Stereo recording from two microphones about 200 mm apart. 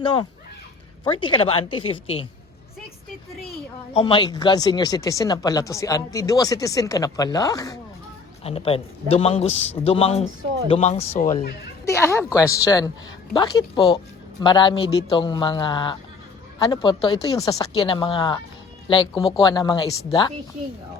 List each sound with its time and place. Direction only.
1.1 s speech: 25° left (ahead or behind)
3.9 s speech: 25° left (ahead or behind)
8.4 s a man's voice: 30° left (ahead or behind)
11.9 s speech: 15° left (ahead or behind)